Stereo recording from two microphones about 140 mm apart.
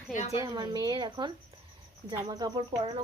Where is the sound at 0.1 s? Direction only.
60° left (ahead or behind).